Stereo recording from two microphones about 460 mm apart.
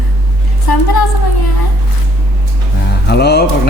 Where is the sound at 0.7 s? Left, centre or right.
Left.